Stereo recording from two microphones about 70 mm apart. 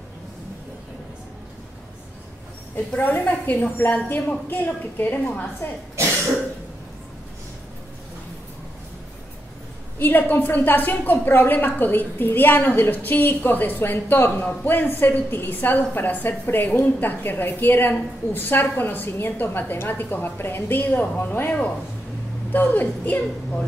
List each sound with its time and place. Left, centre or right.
2.7 s a woman's voice: left
9.9 s a woman's voice: left